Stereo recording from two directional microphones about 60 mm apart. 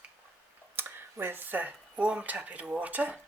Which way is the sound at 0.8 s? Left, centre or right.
Right.